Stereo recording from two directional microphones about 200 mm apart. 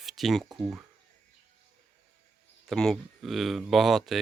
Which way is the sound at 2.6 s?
Centre (ahead or behind).